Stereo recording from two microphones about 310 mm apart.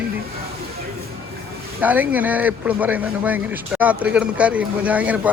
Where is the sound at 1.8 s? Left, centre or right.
Centre.